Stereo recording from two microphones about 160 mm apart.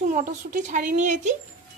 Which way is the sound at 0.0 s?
55° right (ahead or behind).